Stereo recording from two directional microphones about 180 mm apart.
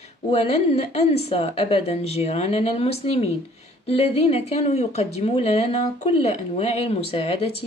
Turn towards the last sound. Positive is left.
turn(degrees=35)  # may be behind; listen again after turning